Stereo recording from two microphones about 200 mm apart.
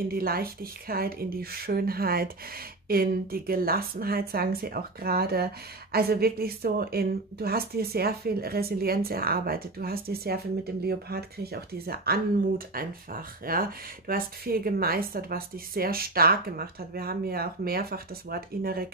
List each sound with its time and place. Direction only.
0.1 s a woman's voice: 50° right (ahead or behind)